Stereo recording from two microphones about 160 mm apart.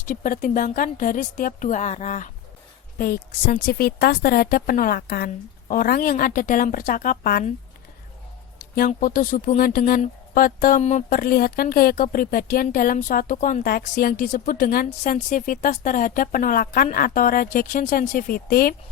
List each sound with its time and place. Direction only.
0.1 s speech: 55° left (ahead or behind)
3.0 s a woman's voice: 60° left (ahead or behind)
8.9 s speech: 60° left (ahead or behind)
11.2 s speech: 70° left (ahead or behind)